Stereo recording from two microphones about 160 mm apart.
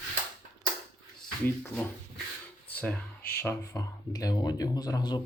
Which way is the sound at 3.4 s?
20° left (ahead or behind).